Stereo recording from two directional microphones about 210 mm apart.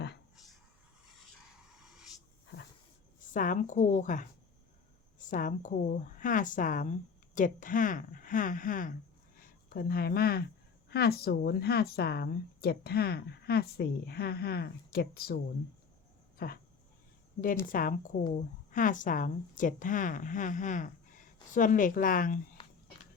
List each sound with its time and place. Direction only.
1.1 s a sound: centre (ahead or behind)
3.3 s a woman's voice: 40° left (ahead or behind)
16.4 s speech: 45° left (ahead or behind)
17.7 s a woman's voice: 40° left (ahead or behind)